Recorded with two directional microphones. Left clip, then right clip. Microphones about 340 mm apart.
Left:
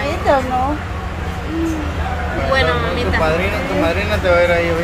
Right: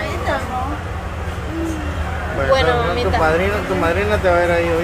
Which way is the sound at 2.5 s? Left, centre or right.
Right.